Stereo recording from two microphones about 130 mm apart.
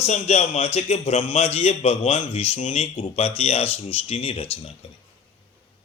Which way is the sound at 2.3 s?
50° left (ahead or behind).